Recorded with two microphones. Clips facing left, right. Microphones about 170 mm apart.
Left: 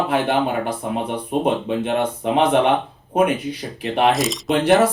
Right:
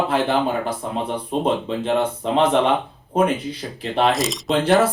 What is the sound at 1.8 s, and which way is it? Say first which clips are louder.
Speech: even; 10° left (ahead or behind).